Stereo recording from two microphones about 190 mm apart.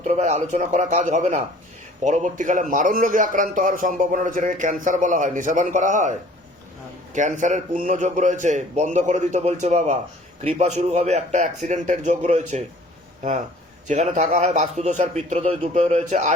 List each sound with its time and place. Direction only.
0.0 s a man's voice: 35° right (ahead or behind)
13.8 s a man's voice: 40° right (ahead or behind)